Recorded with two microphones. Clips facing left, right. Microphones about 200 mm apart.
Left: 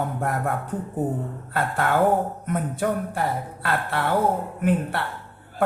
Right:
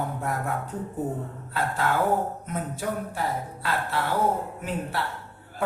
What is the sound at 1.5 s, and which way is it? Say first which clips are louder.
A man's voice: left 3 dB; 55° left (ahead or behind).